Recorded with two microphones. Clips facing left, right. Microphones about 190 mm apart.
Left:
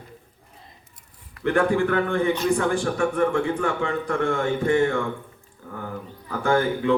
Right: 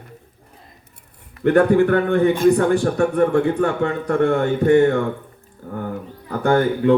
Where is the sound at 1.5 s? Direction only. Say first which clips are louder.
Right 6 dB; 40° right (ahead or behind).